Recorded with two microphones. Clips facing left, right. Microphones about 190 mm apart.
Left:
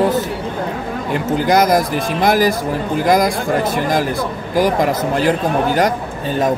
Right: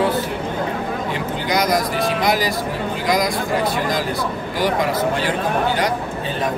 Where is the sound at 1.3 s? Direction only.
50° left (ahead or behind).